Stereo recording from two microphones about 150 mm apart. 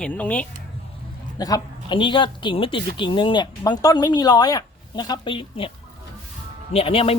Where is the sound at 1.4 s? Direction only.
30° left (ahead or behind).